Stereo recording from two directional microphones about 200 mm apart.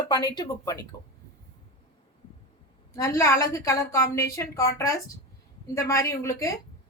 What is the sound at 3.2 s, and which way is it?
A woman's voice, 15° left (ahead or behind).